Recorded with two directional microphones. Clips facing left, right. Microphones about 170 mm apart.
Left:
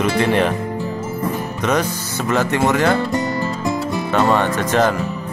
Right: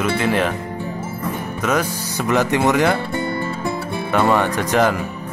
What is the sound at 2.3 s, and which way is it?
Speech, 15° right (ahead or behind).